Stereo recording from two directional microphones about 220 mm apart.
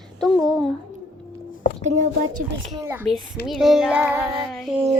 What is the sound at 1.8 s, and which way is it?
Speech, 35° right (ahead or behind).